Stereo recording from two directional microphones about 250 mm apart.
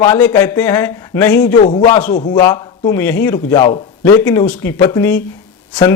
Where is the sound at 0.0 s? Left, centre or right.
Centre.